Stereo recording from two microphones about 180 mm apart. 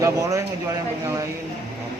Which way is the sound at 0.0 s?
20° right (ahead or behind).